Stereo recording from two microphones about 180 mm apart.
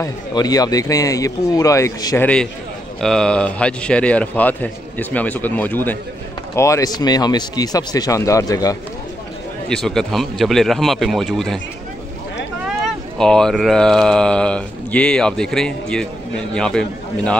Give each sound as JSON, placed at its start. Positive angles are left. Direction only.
{"t": 0.0, "sound": "a man's voice", "side_deg": 20}
{"t": 3.0, "sound": "a man's voice", "side_deg": 5}
{"t": 9.7, "sound": "speech", "side_deg": 5}
{"t": 12.6, "sound": "speech", "side_deg": 0}